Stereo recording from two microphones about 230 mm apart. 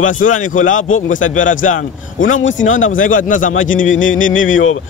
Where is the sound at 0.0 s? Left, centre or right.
Left.